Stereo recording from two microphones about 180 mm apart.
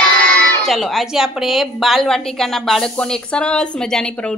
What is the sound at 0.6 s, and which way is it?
A woman's voice, centre (ahead or behind).